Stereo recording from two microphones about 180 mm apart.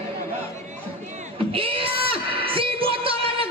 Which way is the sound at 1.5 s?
30° right (ahead or behind).